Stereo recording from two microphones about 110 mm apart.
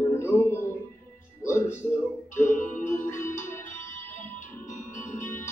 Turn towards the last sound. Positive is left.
turn(degrees=20)  # may be behind; listen again after turning